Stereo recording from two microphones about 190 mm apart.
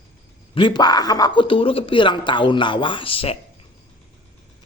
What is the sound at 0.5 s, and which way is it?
A man's voice, 25° left (ahead or behind).